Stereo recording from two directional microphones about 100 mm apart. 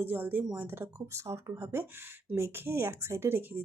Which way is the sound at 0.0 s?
20° right (ahead or behind).